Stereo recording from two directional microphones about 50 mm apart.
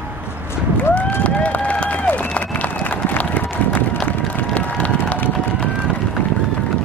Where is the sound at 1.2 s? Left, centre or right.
Left.